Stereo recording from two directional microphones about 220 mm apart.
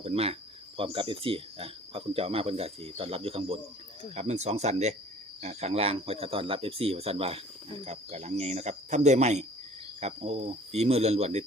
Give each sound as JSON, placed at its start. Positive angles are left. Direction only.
{"t": 0.0, "sound": "speech", "side_deg": -25}